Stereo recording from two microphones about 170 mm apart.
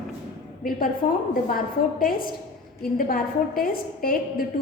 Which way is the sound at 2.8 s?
55° left (ahead or behind).